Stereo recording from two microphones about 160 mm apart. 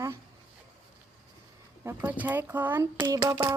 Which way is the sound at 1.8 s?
15° right (ahead or behind).